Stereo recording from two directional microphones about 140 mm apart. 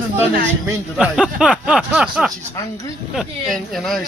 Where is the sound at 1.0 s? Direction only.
5° right (ahead or behind).